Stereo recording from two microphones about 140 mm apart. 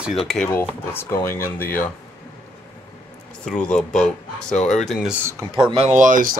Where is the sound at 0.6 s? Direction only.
15° left (ahead or behind).